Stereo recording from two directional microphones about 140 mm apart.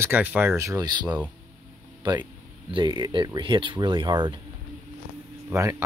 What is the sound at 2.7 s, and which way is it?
Speech, 30° right (ahead or behind).